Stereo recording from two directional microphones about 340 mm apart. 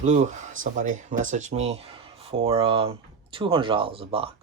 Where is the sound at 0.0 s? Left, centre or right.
Right.